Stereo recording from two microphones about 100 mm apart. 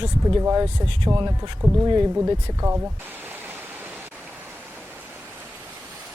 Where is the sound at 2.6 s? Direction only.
30° right (ahead or behind).